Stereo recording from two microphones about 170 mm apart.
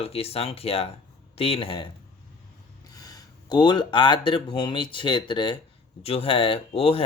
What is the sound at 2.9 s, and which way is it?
Speech, 20° left (ahead or behind).